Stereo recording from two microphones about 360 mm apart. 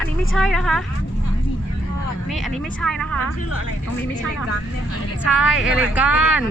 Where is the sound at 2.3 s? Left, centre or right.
Centre.